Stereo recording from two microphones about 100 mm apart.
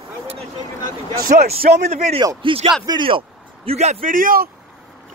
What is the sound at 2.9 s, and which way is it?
Speech, 55° right (ahead or behind).